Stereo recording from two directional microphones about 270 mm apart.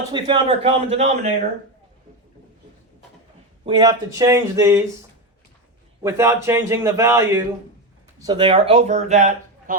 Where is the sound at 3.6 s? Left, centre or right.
Centre.